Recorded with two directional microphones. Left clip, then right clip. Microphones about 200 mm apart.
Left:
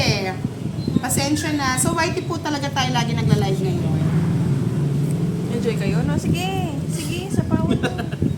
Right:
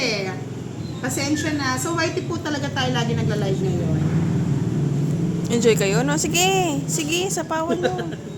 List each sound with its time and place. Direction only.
1.2 s a woman's voice: 35° left (ahead or behind)
5.5 s speech: 55° right (ahead or behind)